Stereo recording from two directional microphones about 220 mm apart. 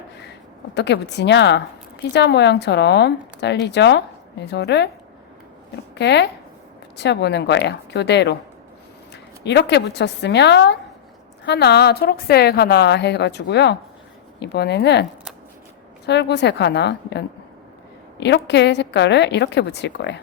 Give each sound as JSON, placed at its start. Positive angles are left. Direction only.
{"t": 0.7, "sound": "a woman's voice", "side_deg": 50}
{"t": 5.9, "sound": "a woman's voice", "side_deg": 50}
{"t": 9.4, "sound": "a woman's voice", "side_deg": 50}
{"t": 16.0, "sound": "a woman's voice", "side_deg": 50}